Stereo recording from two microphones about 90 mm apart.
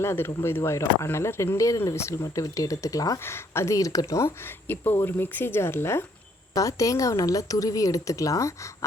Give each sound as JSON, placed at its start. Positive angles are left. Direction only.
{"t": 0.0, "sound": "speech", "side_deg": 30}
{"t": 3.2, "sound": "speech", "side_deg": 30}
{"t": 4.9, "sound": "speech", "side_deg": 25}
{"t": 6.5, "sound": "speech", "side_deg": 40}